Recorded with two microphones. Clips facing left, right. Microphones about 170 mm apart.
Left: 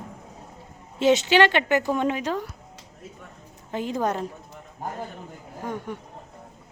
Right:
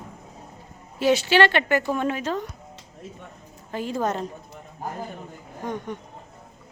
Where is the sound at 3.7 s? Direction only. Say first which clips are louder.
Even; 20° left (ahead or behind).